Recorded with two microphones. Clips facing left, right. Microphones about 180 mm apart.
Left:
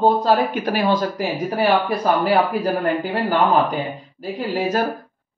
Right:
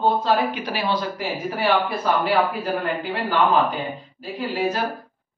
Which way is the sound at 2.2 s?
40° left (ahead or behind).